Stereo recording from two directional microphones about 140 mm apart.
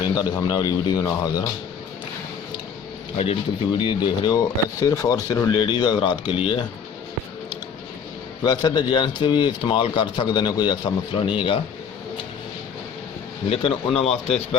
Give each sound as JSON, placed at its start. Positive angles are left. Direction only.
{"t": 0.0, "sound": "a man's voice", "side_deg": 25}
{"t": 3.8, "sound": "a man's voice", "side_deg": 35}
{"t": 8.4, "sound": "a man's voice", "side_deg": 30}
{"t": 13.5, "sound": "speech", "side_deg": 40}